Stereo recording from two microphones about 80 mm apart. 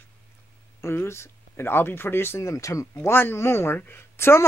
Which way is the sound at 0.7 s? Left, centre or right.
Left.